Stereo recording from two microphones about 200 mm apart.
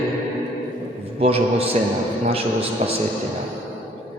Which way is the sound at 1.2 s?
30° right (ahead or behind).